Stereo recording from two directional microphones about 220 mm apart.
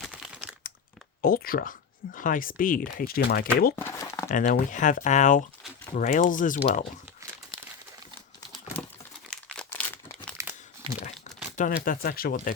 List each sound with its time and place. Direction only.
0.0 s crumpling: centre (ahead or behind)
1.2 s speech: 40° left (ahead or behind)
3.8 s crumpling: 15° left (ahead or behind)
4.3 s speech: 35° left (ahead or behind)
9.3 s crumpling: 5° left (ahead or behind)
11.5 s speech: 35° left (ahead or behind)